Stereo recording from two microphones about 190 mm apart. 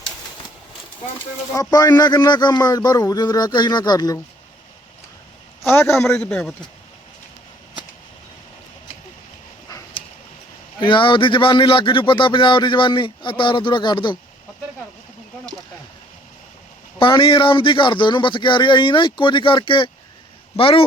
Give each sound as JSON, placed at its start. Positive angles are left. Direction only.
{"t": 1.5, "sound": "a man's voice", "side_deg": 20}
{"t": 5.6, "sound": "a man's voice", "side_deg": 15}
{"t": 9.6, "sound": "a sound", "side_deg": 20}
{"t": 10.8, "sound": "a man's voice", "side_deg": 25}
{"t": 17.0, "sound": "a man's voice", "side_deg": 25}